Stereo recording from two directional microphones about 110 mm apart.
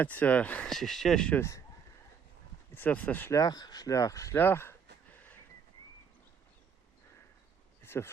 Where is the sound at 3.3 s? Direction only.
35° left (ahead or behind).